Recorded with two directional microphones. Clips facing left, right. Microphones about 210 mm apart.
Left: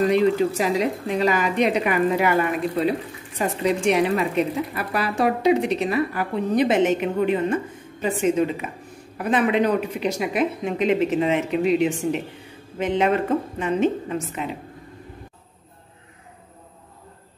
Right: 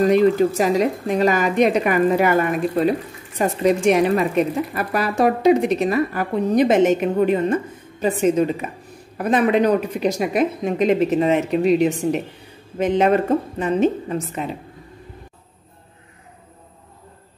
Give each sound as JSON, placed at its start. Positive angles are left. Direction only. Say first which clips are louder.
{"t": 0.0, "sound": "a woman's voice", "louder": "right 3 dB", "side_deg": -45}
{"t": 3.3, "sound": "a woman's voice", "louder": "right 4 dB", "side_deg": -45}